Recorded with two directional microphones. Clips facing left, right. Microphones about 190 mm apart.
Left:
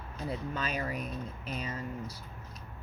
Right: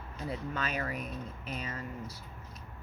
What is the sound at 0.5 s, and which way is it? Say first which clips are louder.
Speech: left 1 dB; 35° left (ahead or behind).